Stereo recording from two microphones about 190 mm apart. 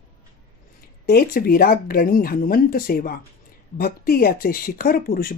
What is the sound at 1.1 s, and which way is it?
Speech, 50° left (ahead or behind).